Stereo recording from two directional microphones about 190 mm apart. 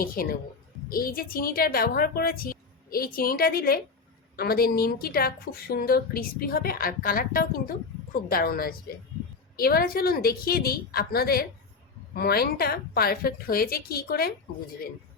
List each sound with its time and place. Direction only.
0.0 s a woman's voice: 50° left (ahead or behind)